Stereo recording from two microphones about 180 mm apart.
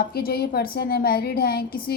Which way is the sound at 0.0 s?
55° left (ahead or behind).